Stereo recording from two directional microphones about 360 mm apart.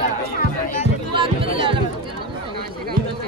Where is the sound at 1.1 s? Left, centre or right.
Centre.